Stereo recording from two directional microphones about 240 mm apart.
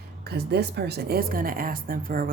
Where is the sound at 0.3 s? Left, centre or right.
Right.